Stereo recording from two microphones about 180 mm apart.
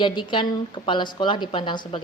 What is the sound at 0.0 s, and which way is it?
A woman's voice, 25° left (ahead or behind).